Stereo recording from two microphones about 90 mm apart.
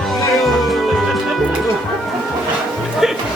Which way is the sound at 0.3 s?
Centre (ahead or behind).